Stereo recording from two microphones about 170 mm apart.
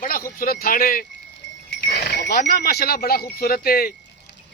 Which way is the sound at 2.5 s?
65° left (ahead or behind).